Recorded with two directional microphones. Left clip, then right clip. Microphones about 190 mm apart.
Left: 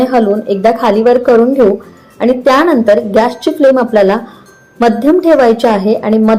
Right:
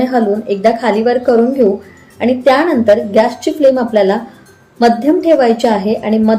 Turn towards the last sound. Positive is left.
turn(degrees=15)  # may be behind; listen again after turning